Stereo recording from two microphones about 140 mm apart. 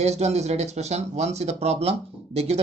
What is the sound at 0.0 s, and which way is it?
Speech, 50° right (ahead or behind).